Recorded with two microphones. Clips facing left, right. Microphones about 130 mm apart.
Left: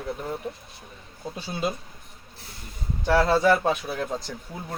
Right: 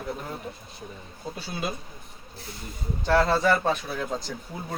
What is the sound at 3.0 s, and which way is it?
Speech, 10° left (ahead or behind).